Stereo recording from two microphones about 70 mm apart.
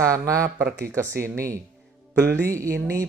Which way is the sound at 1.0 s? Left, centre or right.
Right.